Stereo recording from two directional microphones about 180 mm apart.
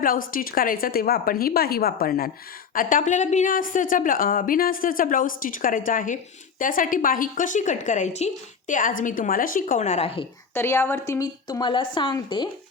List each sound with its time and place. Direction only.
0.0 s a woman's voice: 50° left (ahead or behind)
2.7 s a woman's voice: 45° left (ahead or behind)
10.5 s a woman's voice: 15° left (ahead or behind)